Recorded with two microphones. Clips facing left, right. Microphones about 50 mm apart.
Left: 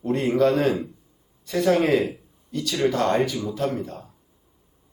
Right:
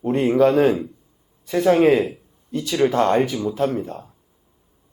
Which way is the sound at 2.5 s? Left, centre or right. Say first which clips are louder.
Right 4 dB; right.